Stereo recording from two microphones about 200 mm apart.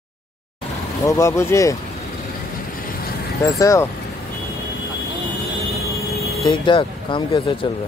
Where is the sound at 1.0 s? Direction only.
15° left (ahead or behind).